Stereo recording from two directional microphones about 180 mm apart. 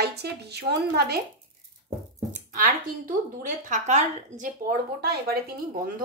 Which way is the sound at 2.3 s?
45° right (ahead or behind).